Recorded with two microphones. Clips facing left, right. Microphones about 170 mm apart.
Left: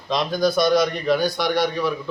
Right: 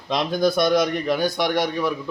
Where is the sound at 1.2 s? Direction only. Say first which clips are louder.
Even; 50° right (ahead or behind).